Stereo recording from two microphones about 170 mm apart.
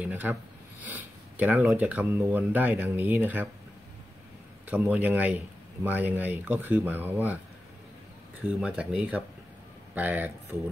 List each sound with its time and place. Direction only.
0.0 s speech: 10° right (ahead or behind)
4.6 s speech: 10° right (ahead or behind)
8.5 s speech: 5° right (ahead or behind)